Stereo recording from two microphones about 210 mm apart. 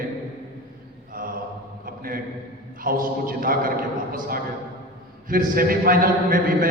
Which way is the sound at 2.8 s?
45° right (ahead or behind).